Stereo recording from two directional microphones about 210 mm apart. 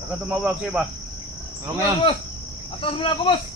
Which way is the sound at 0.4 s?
5° right (ahead or behind).